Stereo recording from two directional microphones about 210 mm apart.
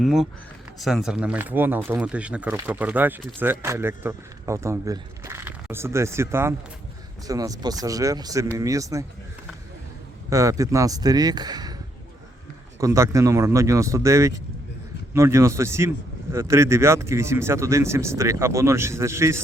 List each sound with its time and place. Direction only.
0.0 s speech: centre (ahead or behind)
10.2 s speech: 15° right (ahead or behind)
12.8 s speech: 15° right (ahead or behind)